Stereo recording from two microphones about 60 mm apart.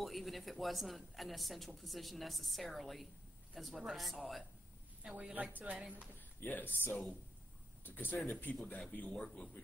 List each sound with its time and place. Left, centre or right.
0.0 s speech: centre
5.1 s speech: right
6.4 s speech: left